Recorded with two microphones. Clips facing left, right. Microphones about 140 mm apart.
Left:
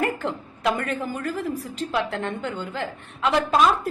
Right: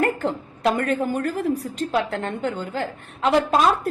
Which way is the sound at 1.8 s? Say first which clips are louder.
Left 1 dB; 45° right (ahead or behind).